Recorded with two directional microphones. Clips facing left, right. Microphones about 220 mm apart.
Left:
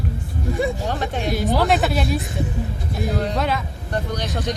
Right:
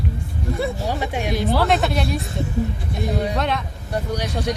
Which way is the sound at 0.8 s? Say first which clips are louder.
Even; 10° right (ahead or behind).